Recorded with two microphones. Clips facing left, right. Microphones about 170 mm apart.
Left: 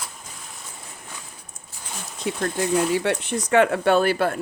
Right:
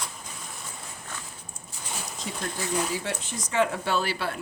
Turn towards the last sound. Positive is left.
turn(degrees=50)  # may be behind; listen again after turning